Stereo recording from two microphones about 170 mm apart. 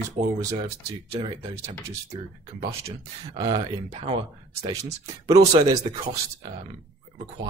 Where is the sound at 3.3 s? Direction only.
25° right (ahead or behind).